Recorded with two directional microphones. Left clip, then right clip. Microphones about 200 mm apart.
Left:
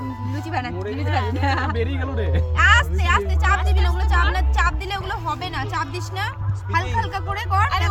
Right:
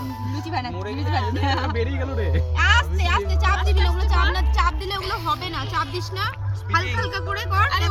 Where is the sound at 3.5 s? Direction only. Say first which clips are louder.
Left 2 dB; 25° left (ahead or behind).